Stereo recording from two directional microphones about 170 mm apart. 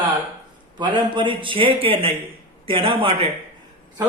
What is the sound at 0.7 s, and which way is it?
A man's voice, 25° right (ahead or behind).